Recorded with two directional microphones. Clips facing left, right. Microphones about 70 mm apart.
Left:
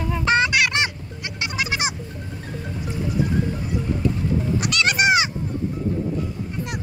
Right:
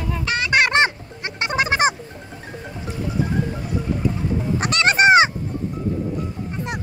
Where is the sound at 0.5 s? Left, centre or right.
Right.